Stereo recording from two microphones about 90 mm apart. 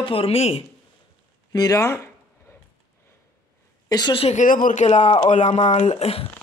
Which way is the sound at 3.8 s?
50° left (ahead or behind).